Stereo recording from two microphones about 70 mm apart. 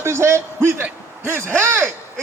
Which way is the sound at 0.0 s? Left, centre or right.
Right.